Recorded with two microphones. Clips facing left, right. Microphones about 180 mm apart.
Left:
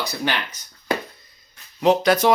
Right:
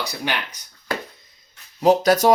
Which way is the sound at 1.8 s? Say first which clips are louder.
Right 1 dB; 40° right (ahead or behind).